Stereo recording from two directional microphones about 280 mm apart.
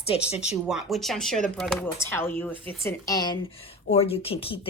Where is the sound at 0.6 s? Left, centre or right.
Centre.